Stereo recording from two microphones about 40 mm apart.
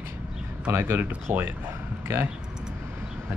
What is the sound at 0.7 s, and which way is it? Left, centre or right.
Speech, right.